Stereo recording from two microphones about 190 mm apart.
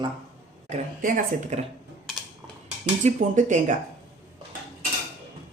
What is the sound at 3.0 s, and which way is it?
Speech, 40° right (ahead or behind).